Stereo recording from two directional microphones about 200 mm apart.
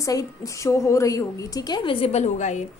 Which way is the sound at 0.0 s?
15° left (ahead or behind).